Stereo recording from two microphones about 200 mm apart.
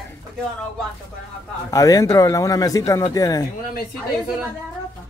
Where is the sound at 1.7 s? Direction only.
15° left (ahead or behind).